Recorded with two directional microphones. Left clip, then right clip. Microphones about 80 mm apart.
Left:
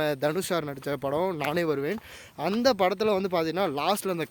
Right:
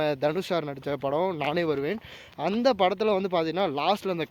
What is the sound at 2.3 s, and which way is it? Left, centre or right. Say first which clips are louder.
Speech: right 1 dB; centre.